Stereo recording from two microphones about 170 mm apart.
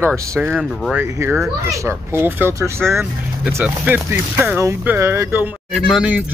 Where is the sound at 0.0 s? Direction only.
15° right (ahead or behind).